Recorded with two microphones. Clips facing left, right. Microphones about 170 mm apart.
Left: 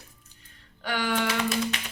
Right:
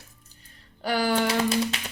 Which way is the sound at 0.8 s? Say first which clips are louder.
Right 4 dB; 35° right (ahead or behind).